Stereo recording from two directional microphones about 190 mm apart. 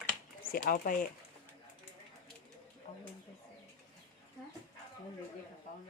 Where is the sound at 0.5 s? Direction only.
45° left (ahead or behind).